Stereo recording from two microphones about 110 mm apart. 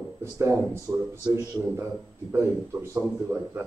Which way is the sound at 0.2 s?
25° right (ahead or behind).